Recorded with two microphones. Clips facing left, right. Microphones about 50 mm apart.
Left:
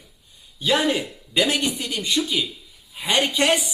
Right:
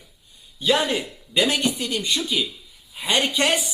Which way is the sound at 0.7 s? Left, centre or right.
Left.